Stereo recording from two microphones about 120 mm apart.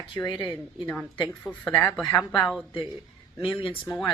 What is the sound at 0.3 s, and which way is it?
Speech, 40° left (ahead or behind).